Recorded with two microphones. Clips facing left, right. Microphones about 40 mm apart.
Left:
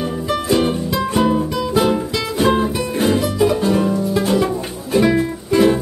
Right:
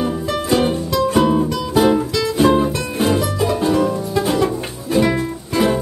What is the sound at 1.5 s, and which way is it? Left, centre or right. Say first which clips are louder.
Music: right 1 dB; centre.